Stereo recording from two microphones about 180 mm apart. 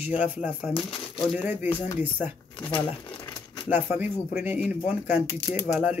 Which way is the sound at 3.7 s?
10° right (ahead or behind).